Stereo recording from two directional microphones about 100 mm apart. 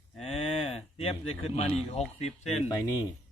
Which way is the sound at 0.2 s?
90° left.